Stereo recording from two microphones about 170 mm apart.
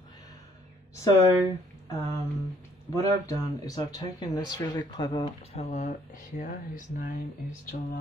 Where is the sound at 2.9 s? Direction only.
20° left (ahead or behind).